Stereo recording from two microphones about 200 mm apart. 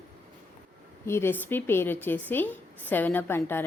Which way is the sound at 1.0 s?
10° left (ahead or behind).